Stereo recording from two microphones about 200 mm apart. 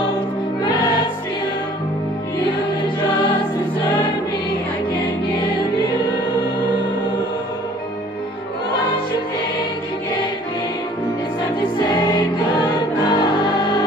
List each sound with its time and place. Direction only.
11.9 s music: 20° left (ahead or behind)